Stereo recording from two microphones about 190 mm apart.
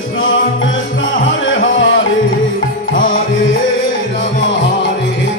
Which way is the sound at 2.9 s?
45° left (ahead or behind).